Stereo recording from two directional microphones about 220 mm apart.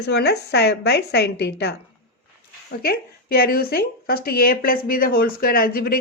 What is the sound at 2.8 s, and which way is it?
A woman's voice, 45° left (ahead or behind).